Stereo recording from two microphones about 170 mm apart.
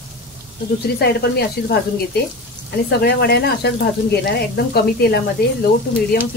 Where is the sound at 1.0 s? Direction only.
70° left (ahead or behind).